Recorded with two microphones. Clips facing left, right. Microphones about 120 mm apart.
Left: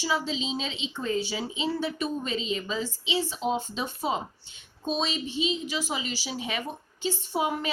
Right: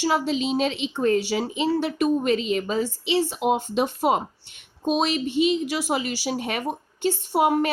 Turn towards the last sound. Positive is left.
turn(degrees=-60)  # may be behind; listen again after turning